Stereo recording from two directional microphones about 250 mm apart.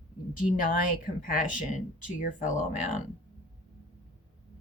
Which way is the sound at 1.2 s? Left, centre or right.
Left.